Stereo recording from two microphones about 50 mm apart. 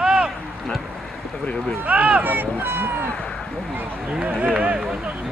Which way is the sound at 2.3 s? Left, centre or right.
Right.